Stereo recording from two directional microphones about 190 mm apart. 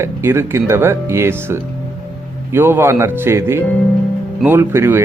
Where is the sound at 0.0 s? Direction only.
15° right (ahead or behind).